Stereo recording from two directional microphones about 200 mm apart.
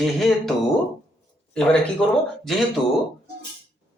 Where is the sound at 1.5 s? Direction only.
5° left (ahead or behind).